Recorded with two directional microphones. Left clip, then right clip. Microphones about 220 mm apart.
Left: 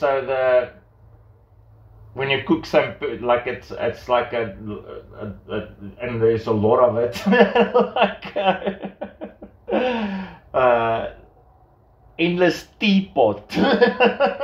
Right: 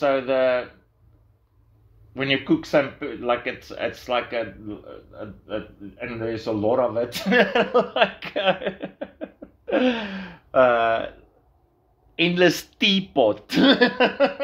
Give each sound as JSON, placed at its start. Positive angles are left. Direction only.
{"t": 0.0, "sound": "a man's voice", "side_deg": -35}
{"t": 2.1, "sound": "a man's voice", "side_deg": -35}
{"t": 5.9, "sound": "a man's voice", "side_deg": -35}
{"t": 9.7, "sound": "gasp", "side_deg": -35}
{"t": 12.2, "sound": "a man's voice", "side_deg": -35}